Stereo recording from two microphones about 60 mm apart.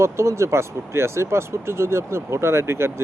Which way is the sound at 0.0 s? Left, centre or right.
Right.